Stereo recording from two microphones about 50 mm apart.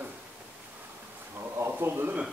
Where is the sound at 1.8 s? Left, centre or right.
Right.